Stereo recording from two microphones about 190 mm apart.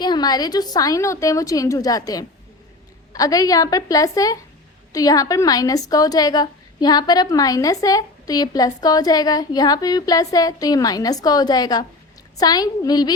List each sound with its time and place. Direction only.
0.0 s a woman's voice: 20° left (ahead or behind)